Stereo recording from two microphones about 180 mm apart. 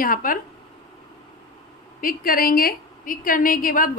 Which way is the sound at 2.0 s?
50° left (ahead or behind).